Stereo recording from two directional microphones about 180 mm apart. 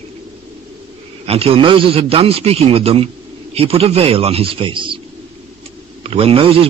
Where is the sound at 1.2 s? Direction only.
30° right (ahead or behind).